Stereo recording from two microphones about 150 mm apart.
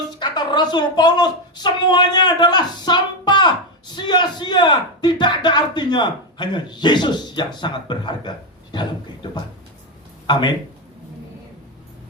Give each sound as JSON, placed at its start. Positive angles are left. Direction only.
{"t": 0.2, "sound": "a man's voice", "side_deg": 30}